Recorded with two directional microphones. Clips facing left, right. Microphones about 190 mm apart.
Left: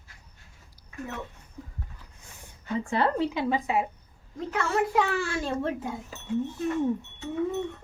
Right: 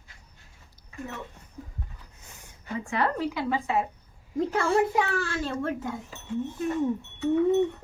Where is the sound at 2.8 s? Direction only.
30° left (ahead or behind).